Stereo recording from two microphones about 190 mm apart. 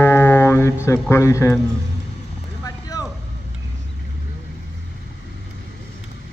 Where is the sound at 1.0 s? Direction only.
15° left (ahead or behind).